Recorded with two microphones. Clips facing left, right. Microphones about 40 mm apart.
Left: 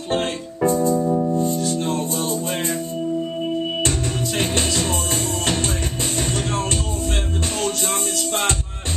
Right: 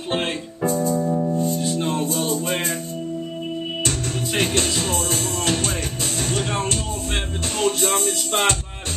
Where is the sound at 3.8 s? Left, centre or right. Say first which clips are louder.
Left 2 dB; left.